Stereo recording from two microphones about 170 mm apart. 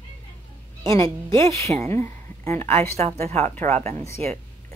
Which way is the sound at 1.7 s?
40° right (ahead or behind).